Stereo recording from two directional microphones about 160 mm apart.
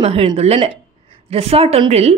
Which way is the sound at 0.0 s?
35° right (ahead or behind).